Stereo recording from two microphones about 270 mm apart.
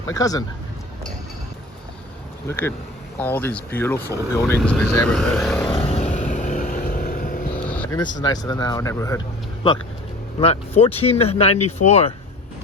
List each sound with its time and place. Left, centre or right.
0.1 s speech: centre
2.5 s speech: centre
5.6 s vehicle: centre
7.7 s vehicle: centre
8.0 s speech: centre
10.4 s speech: left
11.5 s speech: left
11.9 s speech: left